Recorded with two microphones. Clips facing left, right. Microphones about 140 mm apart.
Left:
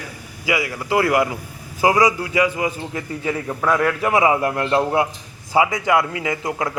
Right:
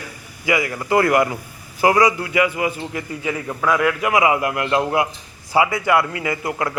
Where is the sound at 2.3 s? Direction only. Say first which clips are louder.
Even; 30° left (ahead or behind).